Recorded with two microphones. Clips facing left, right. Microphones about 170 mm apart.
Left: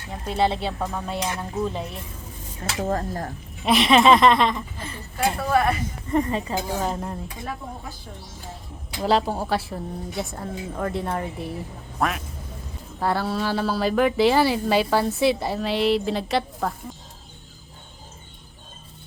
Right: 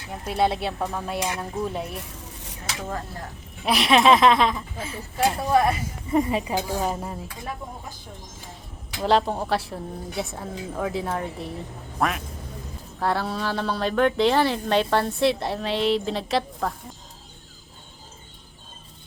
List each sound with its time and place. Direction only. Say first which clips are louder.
0.1 s speech: even; 5° right (ahead or behind)
2.0 s zipper: even; 75° right (ahead or behind)
2.8 s speech: left 8 dB; 45° left (ahead or behind)
3.6 s a woman's voice: left 2 dB; centre (ahead or behind)
9.0 s speech: even; centre (ahead or behind)